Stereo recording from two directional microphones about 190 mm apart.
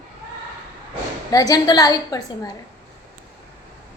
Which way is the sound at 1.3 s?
20° left (ahead or behind).